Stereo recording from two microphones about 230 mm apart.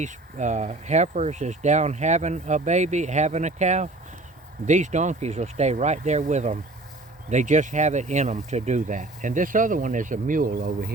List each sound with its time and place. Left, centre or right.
0.0 s speech: right